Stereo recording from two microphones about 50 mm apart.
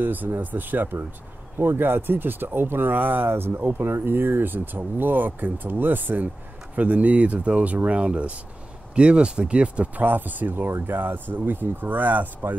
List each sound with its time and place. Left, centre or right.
0.0 s speech: right
10.0 s speech: right